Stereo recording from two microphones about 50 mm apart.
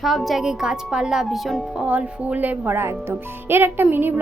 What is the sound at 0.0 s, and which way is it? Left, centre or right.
Speech, centre.